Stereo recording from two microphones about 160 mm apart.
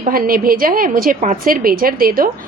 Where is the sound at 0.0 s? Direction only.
65° right (ahead or behind).